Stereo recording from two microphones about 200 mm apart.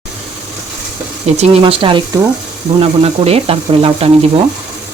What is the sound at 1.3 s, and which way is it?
Speech, 30° right (ahead or behind).